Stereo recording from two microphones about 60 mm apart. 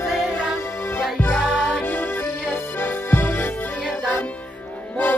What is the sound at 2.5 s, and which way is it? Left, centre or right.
Music, left.